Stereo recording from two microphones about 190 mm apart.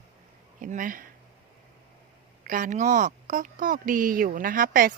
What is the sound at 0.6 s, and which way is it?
Speech, 45° right (ahead or behind).